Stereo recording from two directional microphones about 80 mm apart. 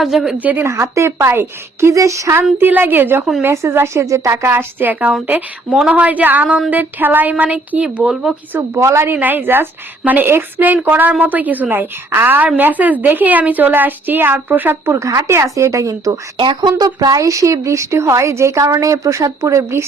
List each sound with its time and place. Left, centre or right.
0.0 s a woman's voice: centre
0.3 s a woman's voice: right
0.6 s speech: right
2.4 s a woman's voice: right
3.4 s a woman's voice: right; by 7.9 s centre
8.1 s speech: centre
8.7 s speech: right
9.1 s a woman's voice: right
14.9 s speech: right
16.6 s speech: right